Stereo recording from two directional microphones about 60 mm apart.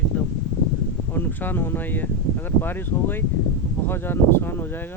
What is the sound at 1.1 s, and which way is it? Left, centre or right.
Speech, left.